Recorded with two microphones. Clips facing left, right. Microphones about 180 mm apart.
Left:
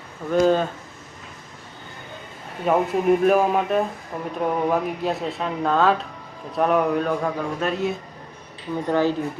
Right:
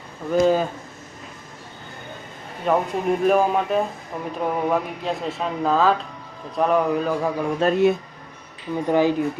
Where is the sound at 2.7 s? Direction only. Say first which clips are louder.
Left 2 dB; 5° left (ahead or behind).